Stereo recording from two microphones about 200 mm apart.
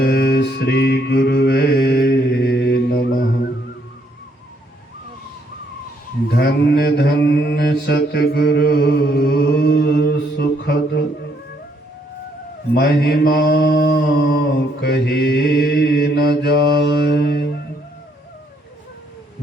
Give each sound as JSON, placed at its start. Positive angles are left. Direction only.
{"t": 0.0, "sound": "mantra", "side_deg": 50}
{"t": 6.3, "sound": "mantra", "side_deg": 50}
{"t": 12.7, "sound": "mantra", "side_deg": 50}